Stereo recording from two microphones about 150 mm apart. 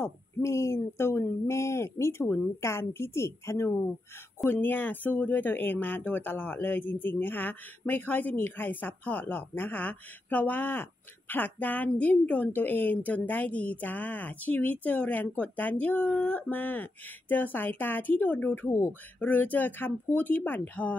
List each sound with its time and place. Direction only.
0.0 s speech: 20° left (ahead or behind)